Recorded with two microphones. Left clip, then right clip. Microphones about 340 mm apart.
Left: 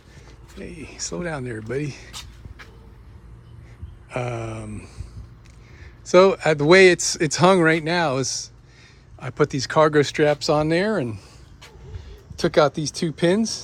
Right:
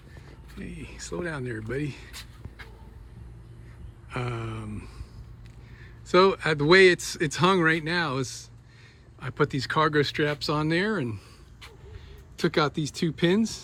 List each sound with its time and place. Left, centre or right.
0.6 s speech: centre
4.1 s speech: centre
6.1 s speech: centre
12.4 s speech: centre